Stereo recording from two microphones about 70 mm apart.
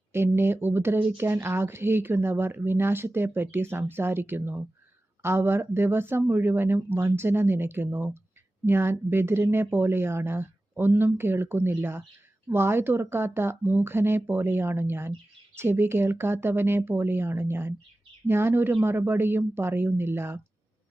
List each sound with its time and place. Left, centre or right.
0.1 s speech: right